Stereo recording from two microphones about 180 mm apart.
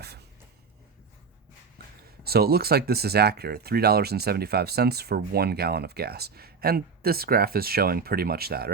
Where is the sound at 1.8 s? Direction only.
55° right (ahead or behind).